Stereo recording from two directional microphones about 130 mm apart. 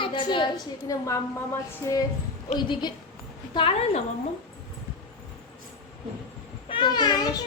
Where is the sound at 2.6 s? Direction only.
35° left (ahead or behind).